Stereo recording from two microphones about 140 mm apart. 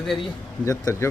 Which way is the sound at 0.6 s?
20° left (ahead or behind).